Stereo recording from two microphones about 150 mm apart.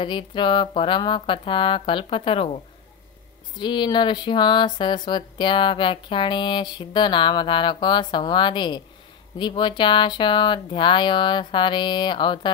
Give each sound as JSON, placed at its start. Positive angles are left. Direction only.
{"t": 0.0, "sound": "speech", "side_deg": 30}
{"t": 3.5, "sound": "speech", "side_deg": 30}